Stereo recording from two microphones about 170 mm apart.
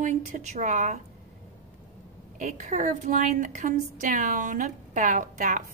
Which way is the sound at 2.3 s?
50° right (ahead or behind).